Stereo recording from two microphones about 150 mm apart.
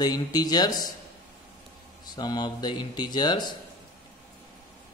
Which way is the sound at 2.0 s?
25° left (ahead or behind).